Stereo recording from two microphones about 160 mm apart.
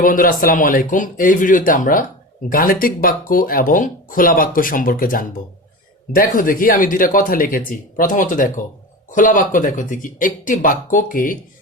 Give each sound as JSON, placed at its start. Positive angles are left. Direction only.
{"t": 0.0, "sound": "speech", "side_deg": 60}